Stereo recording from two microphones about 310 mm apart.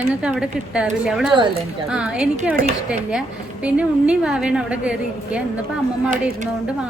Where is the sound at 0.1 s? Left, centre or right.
Centre.